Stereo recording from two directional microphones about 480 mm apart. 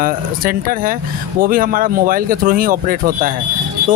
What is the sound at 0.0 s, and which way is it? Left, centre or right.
Speech, centre.